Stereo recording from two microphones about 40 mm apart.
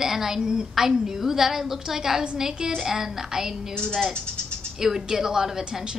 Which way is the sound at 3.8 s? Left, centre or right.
Centre.